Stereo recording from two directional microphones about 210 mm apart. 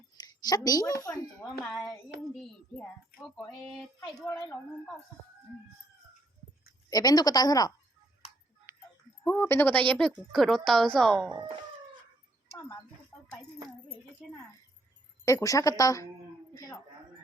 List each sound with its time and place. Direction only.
0.2 s a woman's voice: 20° left (ahead or behind)
1.6 s speech: centre (ahead or behind)
6.9 s speech: 20° left (ahead or behind)
9.2 s speech: 10° left (ahead or behind)
15.2 s speech: 15° left (ahead or behind)